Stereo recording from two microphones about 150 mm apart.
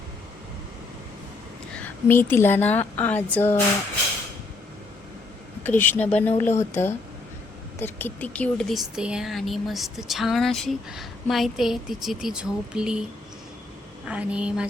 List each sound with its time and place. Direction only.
1.7 s speech: 10° left (ahead or behind)
5.6 s speech: 15° left (ahead or behind); by 13.1 s 5° right (ahead or behind)
14.1 s speech: 10° right (ahead or behind)